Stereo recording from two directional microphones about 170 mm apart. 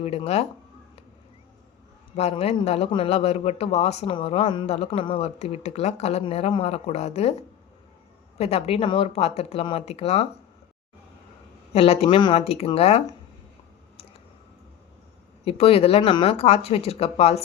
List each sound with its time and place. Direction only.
0.0 s a man's voice: 35° left (ahead or behind)
2.1 s a man's voice: 40° left (ahead or behind)
11.7 s a man's voice: 35° left (ahead or behind)
15.4 s a man's voice: 35° left (ahead or behind)